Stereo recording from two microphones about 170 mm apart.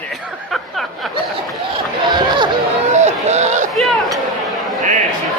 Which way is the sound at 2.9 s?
40° right (ahead or behind).